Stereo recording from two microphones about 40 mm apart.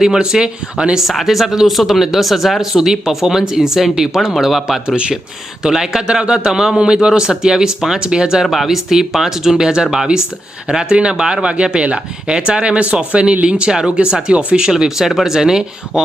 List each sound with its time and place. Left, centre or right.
0.2 s speech: right
1.1 s speech: centre
2.7 s a man's voice: centre
5.6 s a man's voice: centre
8.4 s a man's voice: centre; by 13.7 s right
13.7 s a man's voice: centre
13.9 s speech: right
14.7 s a man's voice: centre